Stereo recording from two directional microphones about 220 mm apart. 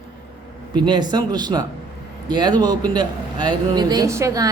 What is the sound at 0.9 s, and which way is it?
A man's voice, 20° right (ahead or behind).